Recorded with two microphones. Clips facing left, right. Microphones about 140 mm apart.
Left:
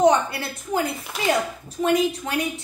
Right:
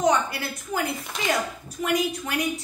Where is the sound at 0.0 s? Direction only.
25° left (ahead or behind).